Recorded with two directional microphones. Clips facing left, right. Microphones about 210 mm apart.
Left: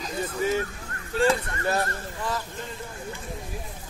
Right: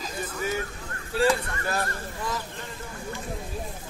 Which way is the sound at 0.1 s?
25° left (ahead or behind).